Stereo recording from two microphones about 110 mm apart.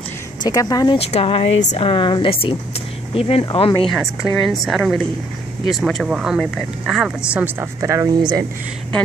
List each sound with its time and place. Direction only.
0.4 s speech: 35° left (ahead or behind)
1.1 s a woman's voice: 60° left (ahead or behind)
3.9 s a woman's voice: centre (ahead or behind)
7.3 s a woman's voice: 20° right (ahead or behind)
8.2 s speech: 40° right (ahead or behind)